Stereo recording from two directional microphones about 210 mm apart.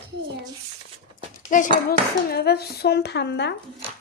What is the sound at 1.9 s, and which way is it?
Speech, 50° left (ahead or behind).